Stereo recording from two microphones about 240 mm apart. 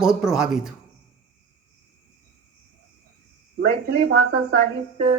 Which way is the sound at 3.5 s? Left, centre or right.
Right.